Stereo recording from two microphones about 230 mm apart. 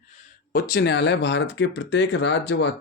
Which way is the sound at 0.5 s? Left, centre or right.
Left.